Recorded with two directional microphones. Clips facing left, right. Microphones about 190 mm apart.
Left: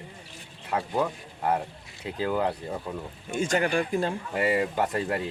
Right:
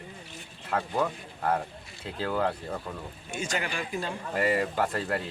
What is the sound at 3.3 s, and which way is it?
Speech, 50° left (ahead or behind).